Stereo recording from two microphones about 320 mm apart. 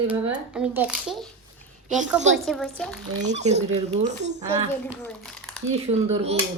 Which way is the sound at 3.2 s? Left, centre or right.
Right.